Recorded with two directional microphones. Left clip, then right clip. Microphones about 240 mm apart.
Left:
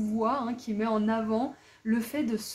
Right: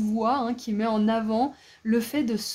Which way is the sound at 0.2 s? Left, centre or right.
Right.